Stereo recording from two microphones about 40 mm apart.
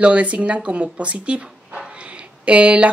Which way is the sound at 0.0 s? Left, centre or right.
Right.